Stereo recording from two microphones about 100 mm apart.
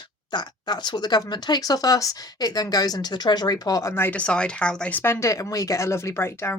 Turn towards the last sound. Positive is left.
turn(degrees=25)  # may be behind; listen again after turning